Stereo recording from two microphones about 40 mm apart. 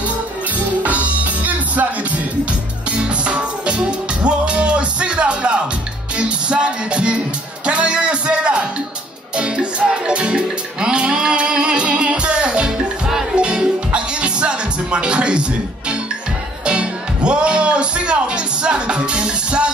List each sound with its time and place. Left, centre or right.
0.8 s music: right
2.9 s music: right
16.6 s music: right